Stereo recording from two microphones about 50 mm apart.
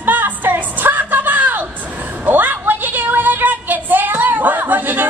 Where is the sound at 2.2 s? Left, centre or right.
Right.